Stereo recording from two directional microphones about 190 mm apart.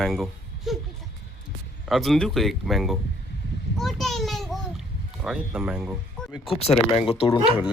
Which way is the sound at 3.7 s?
Centre (ahead or behind).